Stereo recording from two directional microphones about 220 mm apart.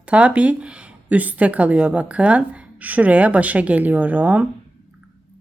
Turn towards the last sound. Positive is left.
turn(degrees=-5)  # may be behind; listen again after turning